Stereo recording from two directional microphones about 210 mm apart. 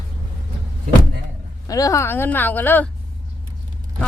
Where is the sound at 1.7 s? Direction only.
15° left (ahead or behind).